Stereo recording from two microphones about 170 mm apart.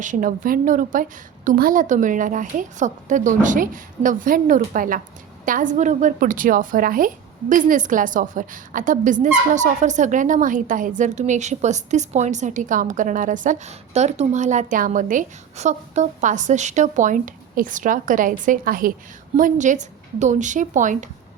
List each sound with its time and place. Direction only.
0.0 s a woman's voice: 50° right (ahead or behind)